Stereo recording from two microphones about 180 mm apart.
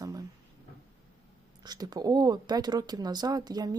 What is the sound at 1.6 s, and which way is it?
Speech, 20° right (ahead or behind).